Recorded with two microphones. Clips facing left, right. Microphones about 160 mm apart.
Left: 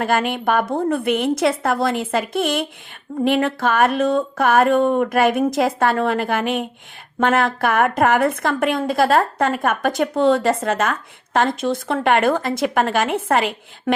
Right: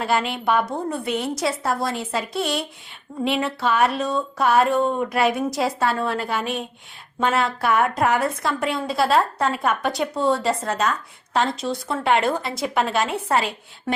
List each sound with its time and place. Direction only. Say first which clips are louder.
0.0 s a woman's voice: left 3 dB; 50° left (ahead or behind)
13.2 s a woman's voice: left 3 dB; 75° left (ahead or behind)